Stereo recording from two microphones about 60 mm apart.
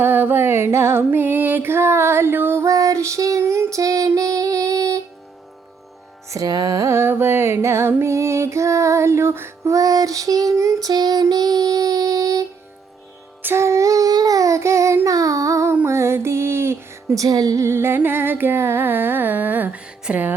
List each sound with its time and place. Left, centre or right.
0.0 s music: right
2.6 s female singing: right
6.2 s music: right
6.9 s music: right
9.6 s a sound: right
10.5 s a sound: right
10.8 s child singing: right
13.4 s music: right
15.0 s child singing: right
15.9 s a sound: right
17.2 s music: right
17.7 s music: right
20.1 s music: centre